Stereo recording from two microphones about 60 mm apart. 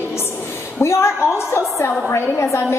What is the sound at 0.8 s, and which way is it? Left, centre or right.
A woman's voice, left.